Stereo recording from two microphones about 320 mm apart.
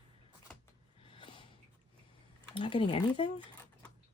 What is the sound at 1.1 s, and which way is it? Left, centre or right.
Snort, centre.